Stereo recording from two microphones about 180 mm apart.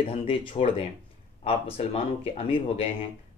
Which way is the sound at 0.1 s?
30° left (ahead or behind).